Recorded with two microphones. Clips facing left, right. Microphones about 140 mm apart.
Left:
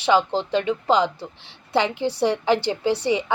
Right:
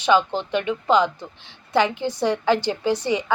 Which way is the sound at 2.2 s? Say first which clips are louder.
Even; 25° left (ahead or behind).